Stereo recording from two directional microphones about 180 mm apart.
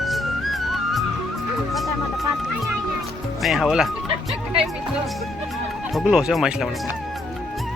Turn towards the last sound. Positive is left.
turn(degrees=-5)  # may be behind; listen again after turning